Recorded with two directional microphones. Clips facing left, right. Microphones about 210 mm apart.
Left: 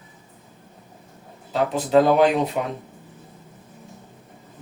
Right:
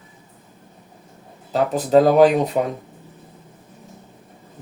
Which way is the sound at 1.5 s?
40° right (ahead or behind).